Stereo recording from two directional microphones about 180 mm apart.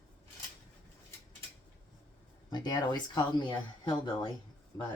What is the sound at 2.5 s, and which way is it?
Speech, 25° left (ahead or behind).